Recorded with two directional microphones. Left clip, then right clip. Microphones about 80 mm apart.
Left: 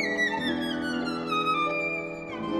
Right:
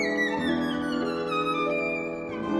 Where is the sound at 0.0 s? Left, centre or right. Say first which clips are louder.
Even; left.